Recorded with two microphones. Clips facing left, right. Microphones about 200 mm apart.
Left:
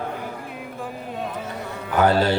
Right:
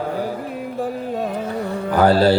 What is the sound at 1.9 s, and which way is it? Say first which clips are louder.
Mantra: right 4 dB; 35° right (ahead or behind).